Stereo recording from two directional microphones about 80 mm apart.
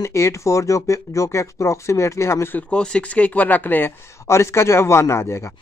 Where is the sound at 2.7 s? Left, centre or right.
Centre; by 5.5 s left.